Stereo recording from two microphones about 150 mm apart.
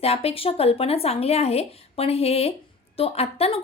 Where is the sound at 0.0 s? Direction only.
40° left (ahead or behind).